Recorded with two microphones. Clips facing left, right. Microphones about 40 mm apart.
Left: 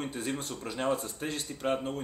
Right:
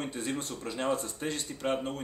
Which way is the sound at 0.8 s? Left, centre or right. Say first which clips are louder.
Left 1 dB; left.